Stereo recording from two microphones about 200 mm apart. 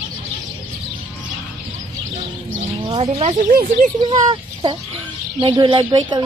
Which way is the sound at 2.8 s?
25° right (ahead or behind).